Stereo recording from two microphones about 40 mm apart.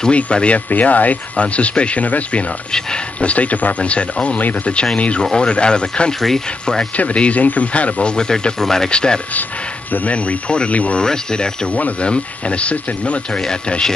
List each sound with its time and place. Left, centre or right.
0.1 s speech: left
0.7 s speech: left
3.9 s speech: left
5.2 s speech: centre
7.0 s speech: left
8.2 s speech: centre
10.0 s speech: left
11.7 s speech: left